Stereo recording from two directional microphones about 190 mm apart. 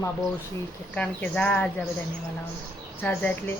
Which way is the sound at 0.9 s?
5° left (ahead or behind).